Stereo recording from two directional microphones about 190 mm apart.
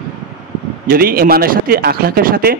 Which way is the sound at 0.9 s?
50° right (ahead or behind).